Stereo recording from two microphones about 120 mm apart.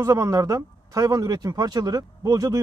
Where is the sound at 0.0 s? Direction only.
30° right (ahead or behind).